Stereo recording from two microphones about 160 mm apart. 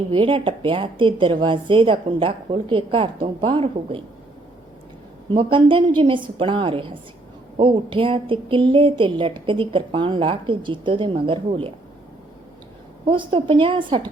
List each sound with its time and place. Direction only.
0.1 s speech: 35° right (ahead or behind)
5.3 s speech: 30° right (ahead or behind)
13.1 s speech: 35° right (ahead or behind)